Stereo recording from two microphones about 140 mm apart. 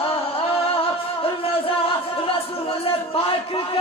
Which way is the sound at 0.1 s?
45° left (ahead or behind).